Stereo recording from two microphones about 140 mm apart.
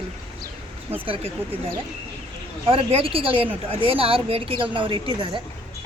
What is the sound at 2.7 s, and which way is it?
Speech, 40° right (ahead or behind).